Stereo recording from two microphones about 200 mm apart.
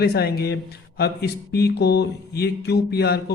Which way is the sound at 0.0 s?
55° left (ahead or behind).